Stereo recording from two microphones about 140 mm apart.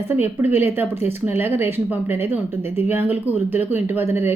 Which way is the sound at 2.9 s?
15° right (ahead or behind).